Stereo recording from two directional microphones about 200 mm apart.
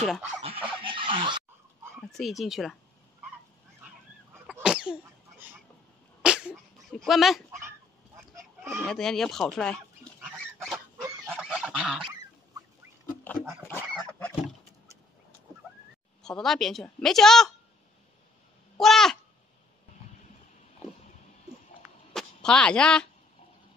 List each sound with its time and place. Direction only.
0.4 s a sound: 30° right (ahead or behind)
2.0 s speech: centre (ahead or behind)
4.6 s sneeze: 5° right (ahead or behind)
6.2 s sneeze: 5° right (ahead or behind)
8.2 s chicken: 15° right (ahead or behind)
8.8 s a woman's voice: centre (ahead or behind)
10.6 s goose: centre (ahead or behind)
13.7 s goose: 5° left (ahead or behind)
16.2 s a woman's voice: 5° left (ahead or behind)
18.8 s a woman's voice: centre (ahead or behind)
22.1 s a sound: 5° left (ahead or behind)